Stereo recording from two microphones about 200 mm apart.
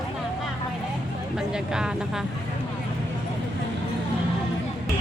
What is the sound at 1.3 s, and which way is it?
Speech, 5° right (ahead or behind).